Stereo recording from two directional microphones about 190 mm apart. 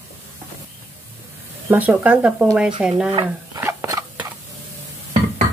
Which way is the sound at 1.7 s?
10° right (ahead or behind).